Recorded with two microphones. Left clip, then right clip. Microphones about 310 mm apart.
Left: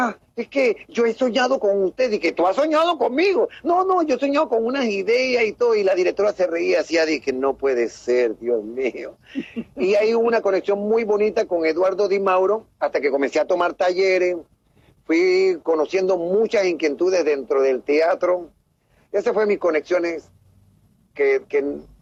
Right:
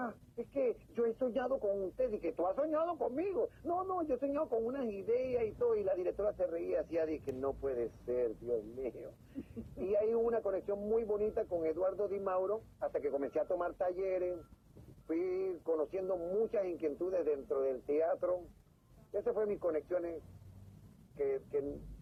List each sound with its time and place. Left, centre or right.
0.0 s speech: left
21.2 s speech: left